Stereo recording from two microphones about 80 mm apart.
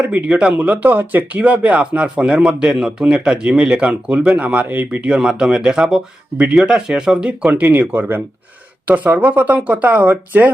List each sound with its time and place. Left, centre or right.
0.0 s speech: centre